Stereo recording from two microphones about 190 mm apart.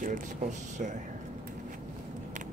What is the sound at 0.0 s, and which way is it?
Speech, 40° right (ahead or behind).